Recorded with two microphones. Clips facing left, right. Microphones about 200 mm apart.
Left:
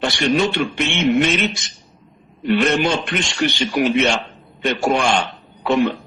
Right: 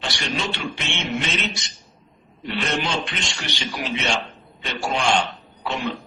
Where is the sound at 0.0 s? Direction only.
55° left (ahead or behind).